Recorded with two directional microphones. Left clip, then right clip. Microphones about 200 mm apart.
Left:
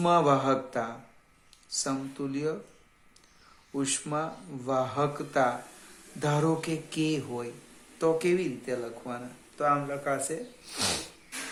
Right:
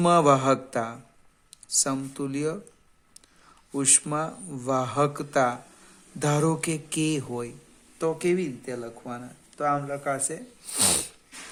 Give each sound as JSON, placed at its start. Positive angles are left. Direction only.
{"t": 0.0, "sound": "speech", "side_deg": -50}
{"t": 3.7, "sound": "speech", "side_deg": -50}
{"t": 7.9, "sound": "speech", "side_deg": -35}